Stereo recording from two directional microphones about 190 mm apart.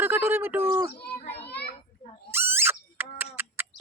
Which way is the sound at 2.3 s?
10° right (ahead or behind).